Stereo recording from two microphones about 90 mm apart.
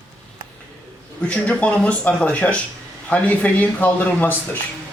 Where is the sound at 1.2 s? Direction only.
15° left (ahead or behind).